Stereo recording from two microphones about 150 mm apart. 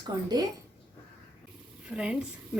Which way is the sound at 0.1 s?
30° right (ahead or behind).